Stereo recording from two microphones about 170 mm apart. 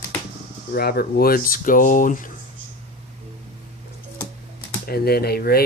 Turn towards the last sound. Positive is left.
turn(degrees=65)  # may be behind; listen again after turning